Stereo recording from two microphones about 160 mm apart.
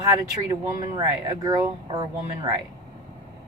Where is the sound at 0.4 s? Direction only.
25° right (ahead or behind).